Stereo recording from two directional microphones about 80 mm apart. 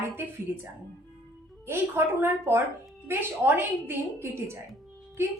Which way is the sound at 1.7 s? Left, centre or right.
Right.